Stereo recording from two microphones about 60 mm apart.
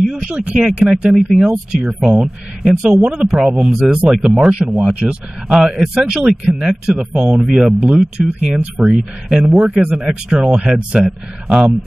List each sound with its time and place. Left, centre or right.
0.3 s a man's voice: right
0.6 s speech: centre
1.1 s speech: centre
3.0 s a man's voice: centre